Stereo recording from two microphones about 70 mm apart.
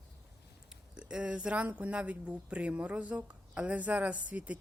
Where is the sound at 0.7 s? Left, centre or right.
Centre.